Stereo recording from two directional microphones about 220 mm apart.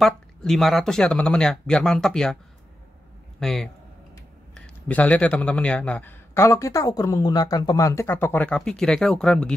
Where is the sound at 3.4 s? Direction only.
Centre (ahead or behind).